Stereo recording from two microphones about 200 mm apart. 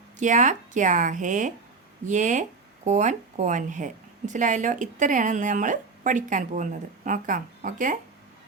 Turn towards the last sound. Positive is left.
turn(degrees=-40)  # may be behind; listen again after turning